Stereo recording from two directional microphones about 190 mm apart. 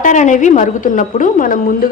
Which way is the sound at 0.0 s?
40° left (ahead or behind).